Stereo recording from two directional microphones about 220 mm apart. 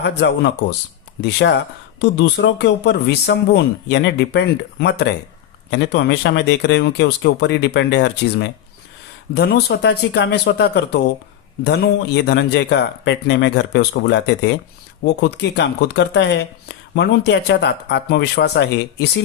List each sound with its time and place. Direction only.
0.0 s speech: 50° left (ahead or behind)